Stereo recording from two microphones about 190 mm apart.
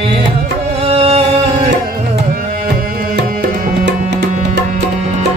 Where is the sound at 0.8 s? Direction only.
30° right (ahead or behind).